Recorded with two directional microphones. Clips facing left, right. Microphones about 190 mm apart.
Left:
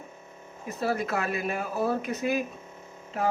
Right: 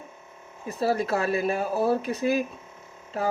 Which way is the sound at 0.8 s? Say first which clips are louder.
Right 4 dB; 30° right (ahead or behind).